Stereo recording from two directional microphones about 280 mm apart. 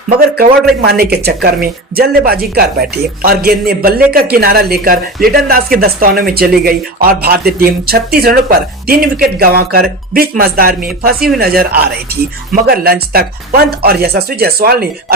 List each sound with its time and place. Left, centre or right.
0.2 s speech: right